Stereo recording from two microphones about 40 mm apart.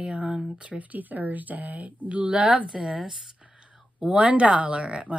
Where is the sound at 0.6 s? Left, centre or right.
Right.